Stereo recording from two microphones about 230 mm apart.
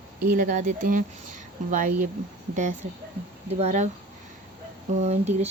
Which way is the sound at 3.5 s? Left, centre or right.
Right.